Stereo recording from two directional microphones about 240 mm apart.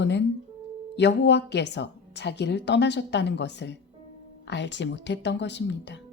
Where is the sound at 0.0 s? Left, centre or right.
Left.